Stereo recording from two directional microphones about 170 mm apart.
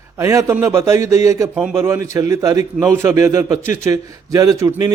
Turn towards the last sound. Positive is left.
turn(degrees=-20)  # may be behind; listen again after turning